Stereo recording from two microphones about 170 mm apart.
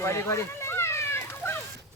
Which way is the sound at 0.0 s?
15° left (ahead or behind).